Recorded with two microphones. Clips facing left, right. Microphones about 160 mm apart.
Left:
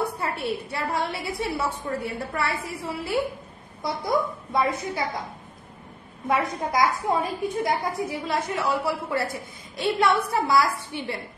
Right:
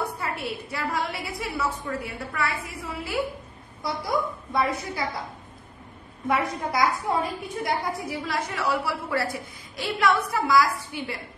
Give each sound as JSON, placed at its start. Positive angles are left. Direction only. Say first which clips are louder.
{"t": 0.0, "sound": "a sound", "louder": "left 2 dB", "side_deg": 30}
{"t": 0.7, "sound": "a woman's voice", "louder": "left 1 dB", "side_deg": 25}
{"t": 6.2, "sound": "a woman's voice", "louder": "left 1 dB", "side_deg": 20}